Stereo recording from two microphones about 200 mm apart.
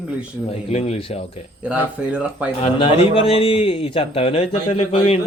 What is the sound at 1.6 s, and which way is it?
Speech, 5° right (ahead or behind).